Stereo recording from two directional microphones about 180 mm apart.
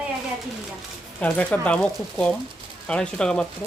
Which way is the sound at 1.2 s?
5° left (ahead or behind).